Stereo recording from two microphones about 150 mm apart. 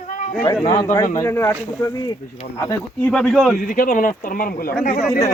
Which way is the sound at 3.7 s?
80° left.